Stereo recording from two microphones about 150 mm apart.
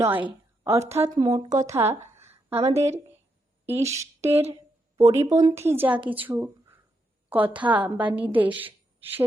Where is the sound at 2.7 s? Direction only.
20° right (ahead or behind).